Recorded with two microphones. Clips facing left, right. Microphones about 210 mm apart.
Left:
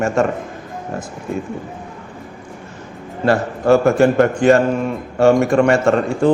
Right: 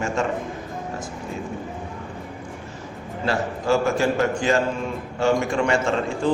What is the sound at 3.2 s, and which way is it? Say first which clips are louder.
A man's voice: left 8 dB; 60° left (ahead or behind).